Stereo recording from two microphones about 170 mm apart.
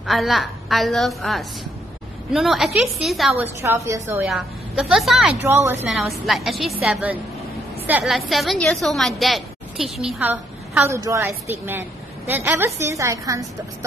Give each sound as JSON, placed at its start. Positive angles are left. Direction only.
{"t": 0.0, "sound": "a woman's voice", "side_deg": 0}
{"t": 3.6, "sound": "a woman's voice", "side_deg": -15}
{"t": 4.3, "sound": "a woman's voice", "side_deg": 0}
{"t": 5.9, "sound": "a woman's voice", "side_deg": 0}